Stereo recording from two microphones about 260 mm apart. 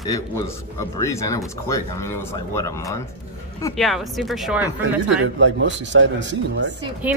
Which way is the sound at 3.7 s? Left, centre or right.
Centre.